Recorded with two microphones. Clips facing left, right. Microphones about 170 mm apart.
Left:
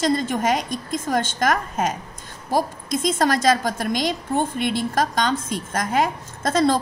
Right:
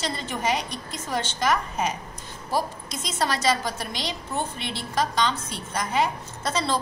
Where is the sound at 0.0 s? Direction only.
45° left (ahead or behind).